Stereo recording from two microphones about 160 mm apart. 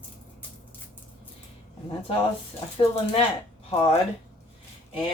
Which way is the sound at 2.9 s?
40° left (ahead or behind).